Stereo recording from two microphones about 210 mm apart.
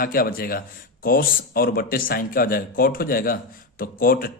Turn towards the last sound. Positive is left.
turn(degrees=45)  # may be behind; listen again after turning